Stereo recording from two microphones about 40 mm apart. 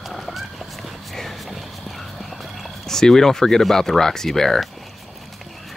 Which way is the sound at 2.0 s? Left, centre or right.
Centre.